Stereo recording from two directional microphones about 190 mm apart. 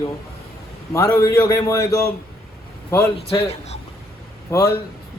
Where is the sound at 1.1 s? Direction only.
15° left (ahead or behind).